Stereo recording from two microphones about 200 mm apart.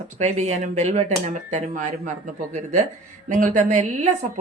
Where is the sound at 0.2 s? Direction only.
35° right (ahead or behind).